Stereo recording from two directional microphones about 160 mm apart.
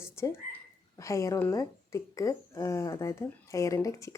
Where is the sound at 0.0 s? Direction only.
15° left (ahead or behind).